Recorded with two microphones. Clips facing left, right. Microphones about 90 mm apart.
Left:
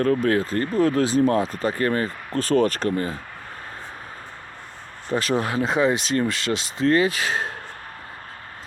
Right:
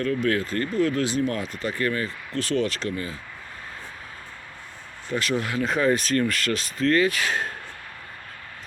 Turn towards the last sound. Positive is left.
turn(degrees=30)  # may be behind; listen again after turning